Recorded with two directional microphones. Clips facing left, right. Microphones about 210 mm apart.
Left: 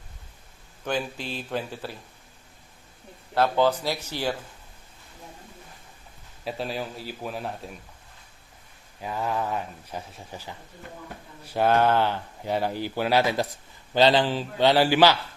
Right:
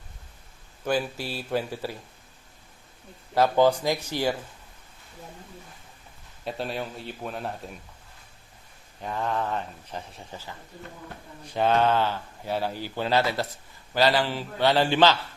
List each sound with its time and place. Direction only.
0.9 s speech: 10° right (ahead or behind)
3.3 s speech: 10° right (ahead or behind)
6.4 s speech: centre (ahead or behind)
9.0 s speech: 5° left (ahead or behind)
11.4 s speech: 10° left (ahead or behind)